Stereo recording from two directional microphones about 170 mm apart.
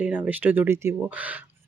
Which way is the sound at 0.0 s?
10° right (ahead or behind).